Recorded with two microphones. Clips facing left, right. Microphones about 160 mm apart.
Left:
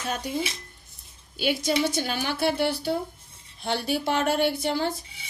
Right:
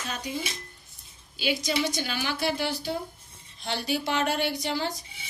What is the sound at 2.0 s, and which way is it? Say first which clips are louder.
Speech: left 3 dB; 50° left (ahead or behind).